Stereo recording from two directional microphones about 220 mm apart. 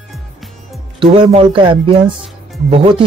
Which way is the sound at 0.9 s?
25° right (ahead or behind).